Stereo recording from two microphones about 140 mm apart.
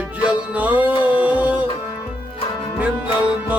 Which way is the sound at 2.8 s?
10° right (ahead or behind).